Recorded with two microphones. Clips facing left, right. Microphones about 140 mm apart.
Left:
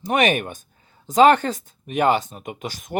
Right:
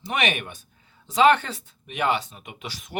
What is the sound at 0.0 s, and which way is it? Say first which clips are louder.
Speech: left 7 dB; 45° left (ahead or behind).